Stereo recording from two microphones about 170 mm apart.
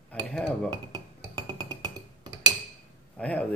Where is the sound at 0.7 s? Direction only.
25° right (ahead or behind).